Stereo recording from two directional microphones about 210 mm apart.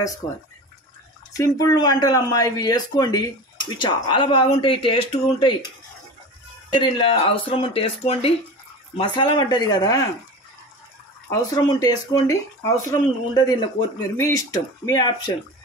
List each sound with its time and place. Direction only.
1.3 s speech: 15° left (ahead or behind)
6.7 s speech: 25° left (ahead or behind)
11.2 s speech: 20° left (ahead or behind)